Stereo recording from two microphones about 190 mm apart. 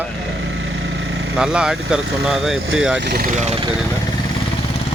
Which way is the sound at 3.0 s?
60° right (ahead or behind).